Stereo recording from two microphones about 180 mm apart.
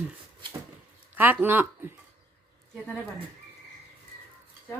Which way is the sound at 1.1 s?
10° right (ahead or behind).